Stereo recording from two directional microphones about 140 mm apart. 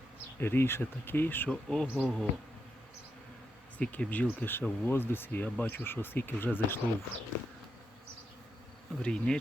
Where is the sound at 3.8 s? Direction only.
10° left (ahead or behind).